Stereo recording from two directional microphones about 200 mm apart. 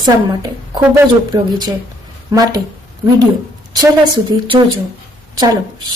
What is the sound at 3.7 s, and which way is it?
A woman's voice, 20° right (ahead or behind).